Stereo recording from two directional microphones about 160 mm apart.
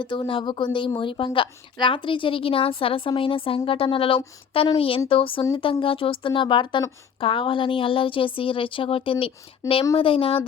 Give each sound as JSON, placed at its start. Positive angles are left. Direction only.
{"t": 0.0, "sound": "a woman's voice", "side_deg": 30}